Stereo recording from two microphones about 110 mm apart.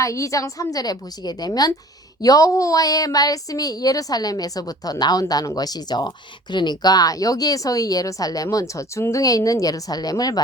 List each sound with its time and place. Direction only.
0.0 s speech: 30° left (ahead or behind)